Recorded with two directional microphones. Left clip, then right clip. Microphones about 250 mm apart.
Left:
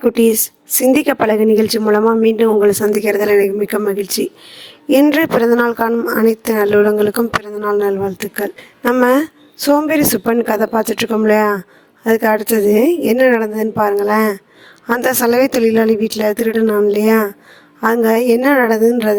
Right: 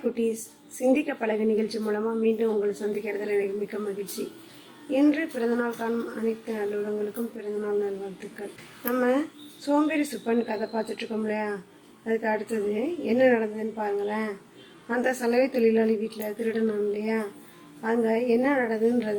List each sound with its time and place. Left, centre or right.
0.0 s a woman's voice: left